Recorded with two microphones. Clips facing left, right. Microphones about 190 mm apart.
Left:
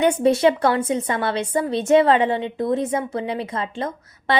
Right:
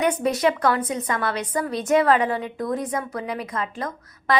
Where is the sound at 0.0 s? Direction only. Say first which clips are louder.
Left 4 dB; 25° left (ahead or behind).